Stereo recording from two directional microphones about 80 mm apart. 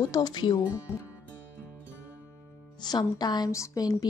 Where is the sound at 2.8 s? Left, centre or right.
Left.